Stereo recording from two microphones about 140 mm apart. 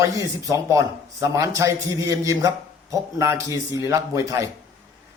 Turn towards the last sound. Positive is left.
turn(degrees=-20)  # may be behind; listen again after turning